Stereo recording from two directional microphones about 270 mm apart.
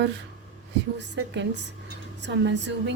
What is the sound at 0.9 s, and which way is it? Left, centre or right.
A woman's voice, right.